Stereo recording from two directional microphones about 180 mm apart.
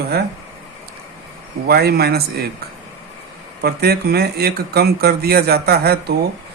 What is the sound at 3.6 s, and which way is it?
Speech, 60° right (ahead or behind).